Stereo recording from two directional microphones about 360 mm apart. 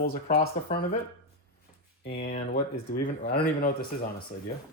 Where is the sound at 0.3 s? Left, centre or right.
Left.